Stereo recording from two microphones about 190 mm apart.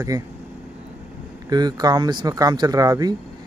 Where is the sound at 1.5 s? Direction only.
20° right (ahead or behind).